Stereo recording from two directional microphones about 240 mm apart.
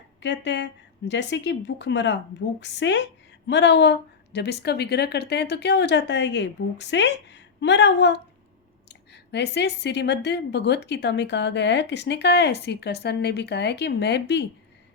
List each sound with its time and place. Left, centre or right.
0.2 s a woman's voice: left